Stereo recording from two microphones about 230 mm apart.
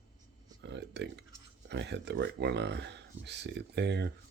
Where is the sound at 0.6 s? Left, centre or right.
Right.